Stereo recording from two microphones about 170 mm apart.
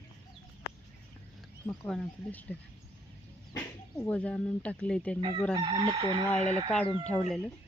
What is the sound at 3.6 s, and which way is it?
Speech, 10° left (ahead or behind).